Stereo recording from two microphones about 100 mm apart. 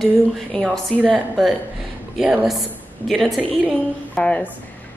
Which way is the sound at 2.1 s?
5° right (ahead or behind).